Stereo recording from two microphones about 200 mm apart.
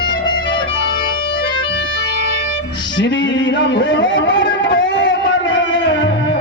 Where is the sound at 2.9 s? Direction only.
60° left (ahead or behind).